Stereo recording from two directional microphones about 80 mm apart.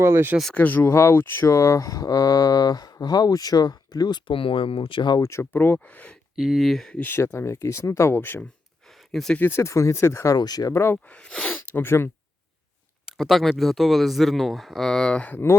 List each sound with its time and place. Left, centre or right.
0.0 s speech: right
0.5 s speech: left
5.2 s speech: left
5.5 s speech: left
6.3 s speech: centre
7.0 s speech: left
8.9 s a sound: centre
9.5 s speech: left
10.3 s speech: left
10.7 s speech: left
10.9 s speech: centre
11.7 s speech: left
13.1 s speech: centre